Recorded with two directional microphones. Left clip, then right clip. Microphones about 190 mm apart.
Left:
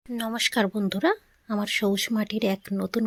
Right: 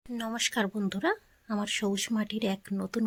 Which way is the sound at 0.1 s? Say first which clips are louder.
Left 5 dB; 15° left (ahead or behind).